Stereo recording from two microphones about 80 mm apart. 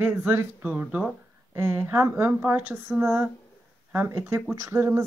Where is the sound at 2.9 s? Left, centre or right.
Centre.